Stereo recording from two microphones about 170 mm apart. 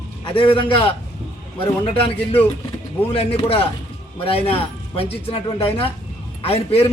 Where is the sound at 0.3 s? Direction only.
30° left (ahead or behind).